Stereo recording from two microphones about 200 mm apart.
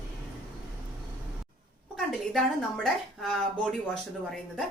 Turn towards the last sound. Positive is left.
turn(degrees=0)  # may be behind; listen again after turning